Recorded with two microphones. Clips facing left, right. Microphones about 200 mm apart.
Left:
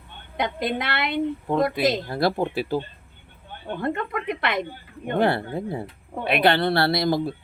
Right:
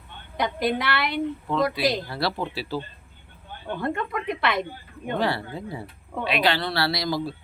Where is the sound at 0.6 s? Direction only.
20° left (ahead or behind).